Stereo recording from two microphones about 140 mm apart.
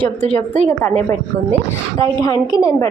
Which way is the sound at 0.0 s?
15° left (ahead or behind).